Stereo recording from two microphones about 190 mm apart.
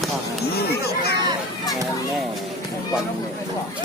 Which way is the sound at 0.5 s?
55° left (ahead or behind).